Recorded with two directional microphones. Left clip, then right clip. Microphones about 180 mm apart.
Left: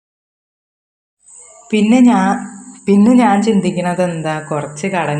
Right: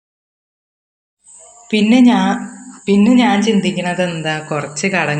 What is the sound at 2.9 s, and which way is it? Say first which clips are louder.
A woman's voice: left 2 dB; 20° left (ahead or behind).